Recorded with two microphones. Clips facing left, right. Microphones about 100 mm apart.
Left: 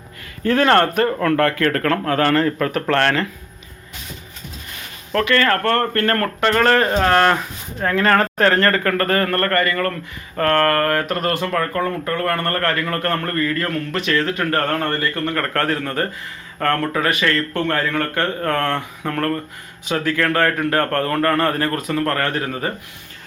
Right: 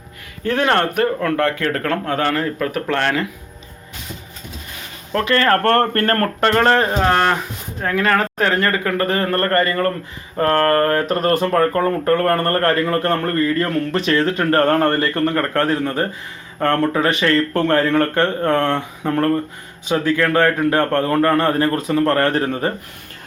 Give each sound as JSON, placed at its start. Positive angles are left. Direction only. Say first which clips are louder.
{"t": 0.4, "sound": "speech", "louder": "left 2 dB", "side_deg": -10}
{"t": 5.2, "sound": "speech", "louder": "right 1 dB", "side_deg": -35}
{"t": 5.6, "sound": "speech", "louder": "right 3 dB", "side_deg": -50}
{"t": 6.8, "sound": "speech", "louder": "left 1 dB", "side_deg": -10}
{"t": 15.4, "sound": "speech", "louder": "right 3 dB", "side_deg": -20}